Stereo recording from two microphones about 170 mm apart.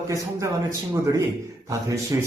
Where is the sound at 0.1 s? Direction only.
20° right (ahead or behind).